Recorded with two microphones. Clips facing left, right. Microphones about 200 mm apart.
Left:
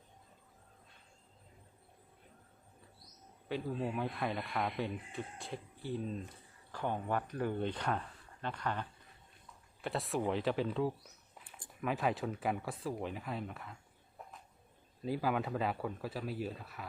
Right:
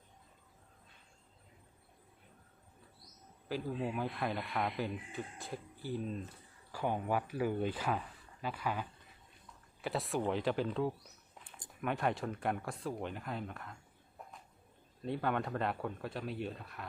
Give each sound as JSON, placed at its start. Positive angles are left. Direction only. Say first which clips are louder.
{"t": 3.5, "sound": "speech", "louder": "even", "side_deg": 0}
{"t": 14.2, "sound": "a sound", "louder": "even", "side_deg": 0}
{"t": 15.0, "sound": "speech", "louder": "left 1 dB", "side_deg": 5}